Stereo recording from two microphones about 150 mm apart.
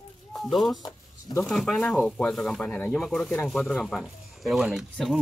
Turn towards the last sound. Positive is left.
turn(degrees=0)  # may be behind; listen again after turning